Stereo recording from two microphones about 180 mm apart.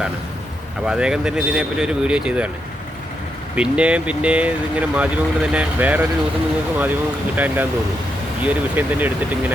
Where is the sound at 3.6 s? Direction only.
5° right (ahead or behind).